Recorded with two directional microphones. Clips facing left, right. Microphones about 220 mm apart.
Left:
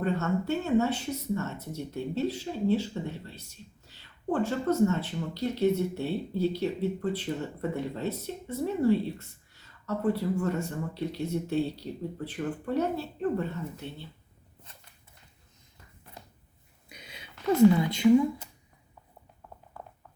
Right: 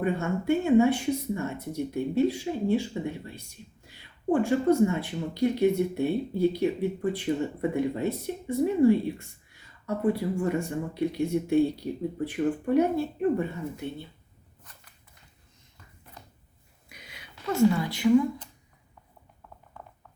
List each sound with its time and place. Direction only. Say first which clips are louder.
0.0 s speech: right 1 dB; 10° right (ahead or behind)
14.7 s walk: even; 25° left (ahead or behind)
16.9 s a sound: left 1 dB; 25° left (ahead or behind)
17.7 s a woman's voice: left 1 dB; 20° left (ahead or behind)